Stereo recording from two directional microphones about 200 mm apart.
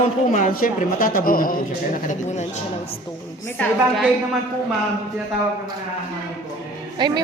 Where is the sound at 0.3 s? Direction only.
40° left (ahead or behind).